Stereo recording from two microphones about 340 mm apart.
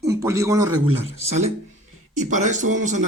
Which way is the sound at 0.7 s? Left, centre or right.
Right.